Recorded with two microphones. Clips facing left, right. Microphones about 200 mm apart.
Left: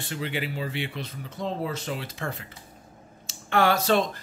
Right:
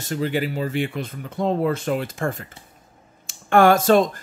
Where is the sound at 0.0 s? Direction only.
40° right (ahead or behind).